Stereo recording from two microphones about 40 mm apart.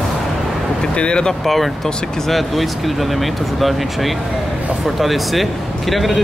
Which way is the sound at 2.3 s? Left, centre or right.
Centre.